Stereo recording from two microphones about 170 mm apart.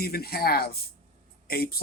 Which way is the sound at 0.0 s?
65° left (ahead or behind).